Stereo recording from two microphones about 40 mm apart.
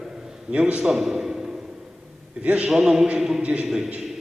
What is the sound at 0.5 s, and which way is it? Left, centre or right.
Speech, right.